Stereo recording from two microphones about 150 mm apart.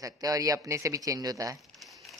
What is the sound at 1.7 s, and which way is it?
Crumpling, centre (ahead or behind).